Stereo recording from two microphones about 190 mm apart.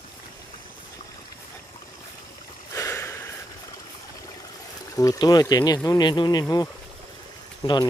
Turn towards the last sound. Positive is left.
turn(degrees=20)  # may be behind; listen again after turning